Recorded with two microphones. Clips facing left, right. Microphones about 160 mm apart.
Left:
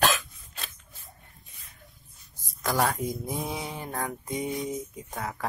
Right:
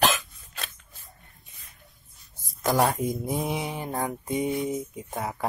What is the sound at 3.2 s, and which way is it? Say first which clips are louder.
Mantra: right 4 dB; 20° right (ahead or behind).